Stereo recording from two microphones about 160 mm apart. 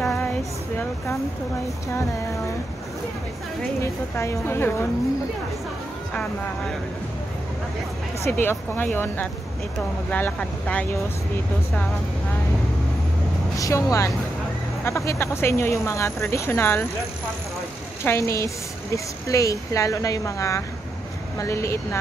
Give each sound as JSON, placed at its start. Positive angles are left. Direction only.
{"t": 0.0, "sound": "a sound", "side_deg": 0}
{"t": 3.8, "sound": "speech", "side_deg": 15}
{"t": 8.2, "sound": "speech", "side_deg": 15}
{"t": 13.6, "sound": "a woman's voice", "side_deg": 20}
{"t": 18.0, "sound": "a woman's voice", "side_deg": 15}